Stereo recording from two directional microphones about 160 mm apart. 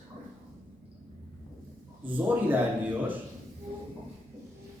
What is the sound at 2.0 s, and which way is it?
A man's voice, 10° right (ahead or behind).